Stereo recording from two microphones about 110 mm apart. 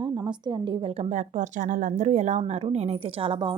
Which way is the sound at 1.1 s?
90° right.